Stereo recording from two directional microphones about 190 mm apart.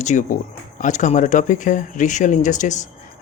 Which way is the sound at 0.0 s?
40° left (ahead or behind).